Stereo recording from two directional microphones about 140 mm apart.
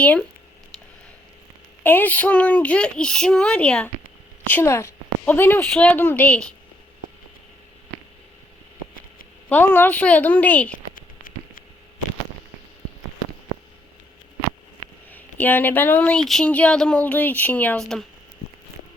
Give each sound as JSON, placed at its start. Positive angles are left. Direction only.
{"t": 0.0, "sound": "speech", "side_deg": 10}
{"t": 1.8, "sound": "a woman's voice", "side_deg": 15}
{"t": 9.5, "sound": "speech", "side_deg": 15}
{"t": 15.1, "sound": "speech", "side_deg": 15}